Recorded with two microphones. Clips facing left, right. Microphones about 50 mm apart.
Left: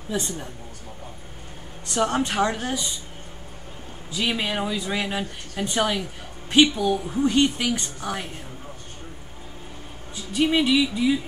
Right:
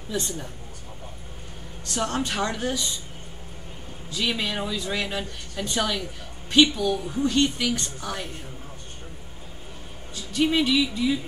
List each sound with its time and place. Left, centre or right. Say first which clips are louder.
2.0 s a woman's voice: left 4 dB; left
4.1 s speech: left 2 dB; centre
10.1 s speech: left 1 dB; centre